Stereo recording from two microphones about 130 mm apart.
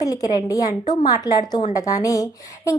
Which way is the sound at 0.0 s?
25° left (ahead or behind).